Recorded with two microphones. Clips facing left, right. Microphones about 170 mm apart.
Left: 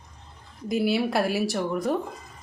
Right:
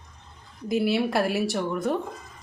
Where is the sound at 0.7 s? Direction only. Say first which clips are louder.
Even; centre (ahead or behind).